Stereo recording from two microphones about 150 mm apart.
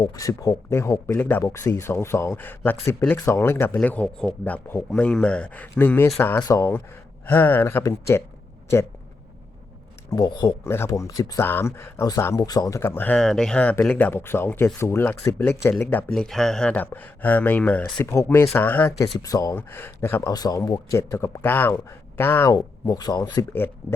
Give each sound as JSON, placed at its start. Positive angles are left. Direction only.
{"t": 0.2, "sound": "speech", "side_deg": 20}
{"t": 10.1, "sound": "speech", "side_deg": 25}
{"t": 18.0, "sound": "speech", "side_deg": 20}
{"t": 20.3, "sound": "speech", "side_deg": 25}
{"t": 22.5, "sound": "speech", "side_deg": 25}